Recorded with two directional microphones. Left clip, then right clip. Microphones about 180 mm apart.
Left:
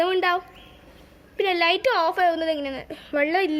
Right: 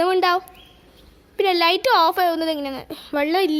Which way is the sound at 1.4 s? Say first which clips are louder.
Right 3 dB; 45° right (ahead or behind).